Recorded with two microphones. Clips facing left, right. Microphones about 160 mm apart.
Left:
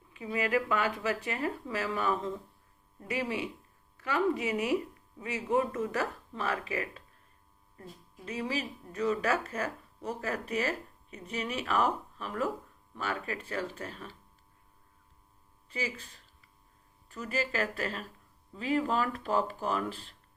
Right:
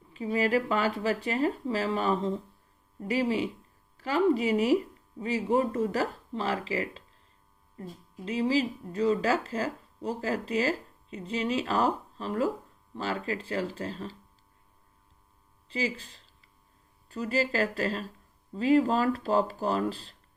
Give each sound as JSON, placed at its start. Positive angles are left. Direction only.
{"t": 0.1, "sound": "speech", "side_deg": -30}
{"t": 15.7, "sound": "speech", "side_deg": -30}